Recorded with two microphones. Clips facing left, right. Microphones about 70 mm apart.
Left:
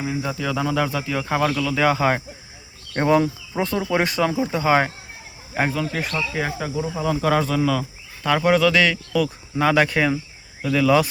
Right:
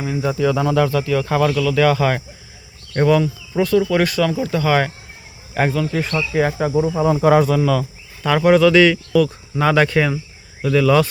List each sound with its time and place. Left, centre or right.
0.0 s speech: centre; by 4.9 s left
5.5 s speech: centre
6.7 s speech: right; by 11.1 s centre